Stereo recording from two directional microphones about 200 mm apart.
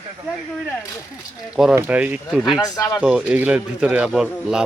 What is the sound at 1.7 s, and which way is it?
Speech, 10° right (ahead or behind).